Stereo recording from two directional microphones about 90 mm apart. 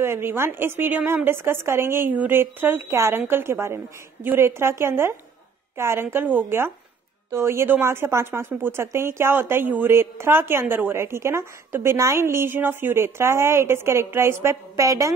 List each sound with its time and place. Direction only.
0.0 s a woman's voice: 25° right (ahead or behind)